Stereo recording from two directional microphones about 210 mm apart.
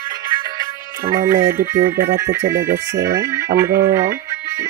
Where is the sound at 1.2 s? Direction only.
15° right (ahead or behind).